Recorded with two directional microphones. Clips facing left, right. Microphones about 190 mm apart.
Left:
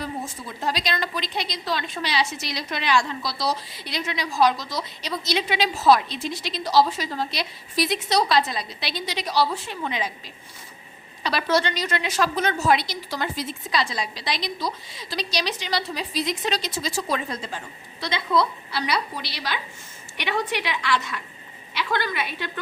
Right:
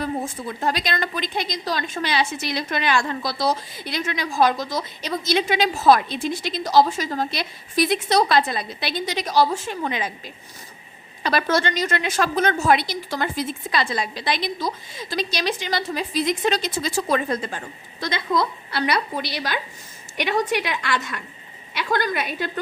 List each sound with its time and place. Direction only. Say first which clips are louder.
0.0 s a woman's voice: right 5 dB; 55° right (ahead or behind)
11.2 s a woman's voice: right 2 dB; 50° right (ahead or behind)